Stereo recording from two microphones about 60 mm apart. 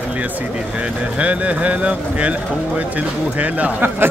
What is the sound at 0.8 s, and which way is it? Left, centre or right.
Speech, right.